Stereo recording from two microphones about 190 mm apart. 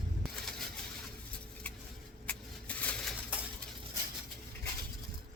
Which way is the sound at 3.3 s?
5° right (ahead or behind).